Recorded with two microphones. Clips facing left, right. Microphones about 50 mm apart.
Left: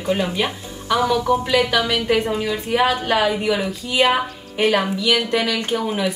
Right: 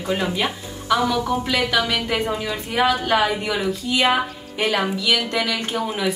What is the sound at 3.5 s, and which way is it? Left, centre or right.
A woman's voice, centre.